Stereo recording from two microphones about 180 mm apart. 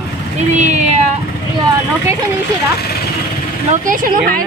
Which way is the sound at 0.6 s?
40° right (ahead or behind).